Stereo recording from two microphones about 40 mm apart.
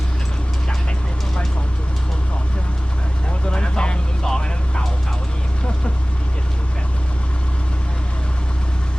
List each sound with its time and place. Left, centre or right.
3.4 s vehicle: left